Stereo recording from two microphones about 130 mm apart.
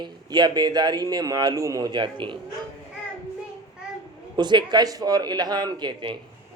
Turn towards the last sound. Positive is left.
turn(degrees=-35)  # may be behind; listen again after turning